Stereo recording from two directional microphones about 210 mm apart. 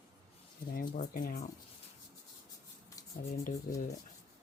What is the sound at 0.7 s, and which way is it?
Speech, 40° left (ahead or behind).